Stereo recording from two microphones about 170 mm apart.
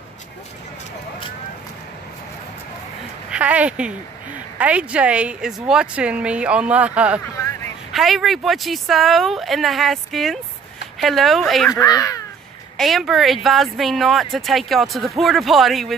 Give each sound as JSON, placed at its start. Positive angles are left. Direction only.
{"t": 3.3, "sound": "a woman's voice", "side_deg": -10}
{"t": 7.3, "sound": "a sound", "side_deg": 15}
{"t": 7.9, "sound": "speech", "side_deg": 0}
{"t": 11.8, "sound": "speech", "side_deg": 20}
{"t": 12.7, "sound": "speech", "side_deg": 0}